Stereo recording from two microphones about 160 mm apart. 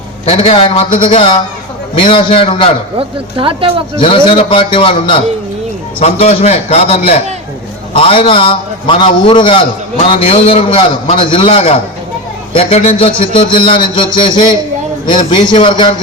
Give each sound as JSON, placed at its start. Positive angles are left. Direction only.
{"t": 0.3, "sound": "a man's voice", "side_deg": 40}
{"t": 3.0, "sound": "speech", "side_deg": -35}
{"t": 4.0, "sound": "a man's voice", "side_deg": 35}